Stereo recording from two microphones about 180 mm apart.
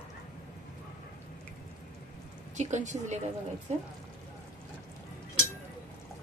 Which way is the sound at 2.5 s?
40° right (ahead or behind).